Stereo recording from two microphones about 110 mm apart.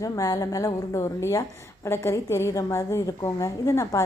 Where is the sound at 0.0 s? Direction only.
30° left (ahead or behind).